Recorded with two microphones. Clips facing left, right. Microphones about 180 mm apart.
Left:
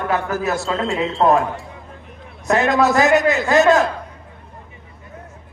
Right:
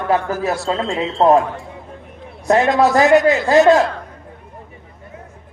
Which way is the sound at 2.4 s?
30° right (ahead or behind).